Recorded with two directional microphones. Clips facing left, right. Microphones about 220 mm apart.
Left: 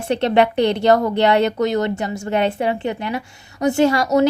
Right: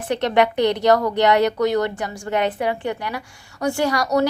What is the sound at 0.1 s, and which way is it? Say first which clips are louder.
Speech: left 2 dB; 30° left (ahead or behind).